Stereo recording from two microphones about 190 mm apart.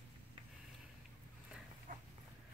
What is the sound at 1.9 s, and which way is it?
Dog, 40° right (ahead or behind).